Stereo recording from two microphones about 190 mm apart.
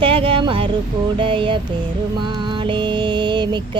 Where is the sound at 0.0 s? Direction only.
30° right (ahead or behind).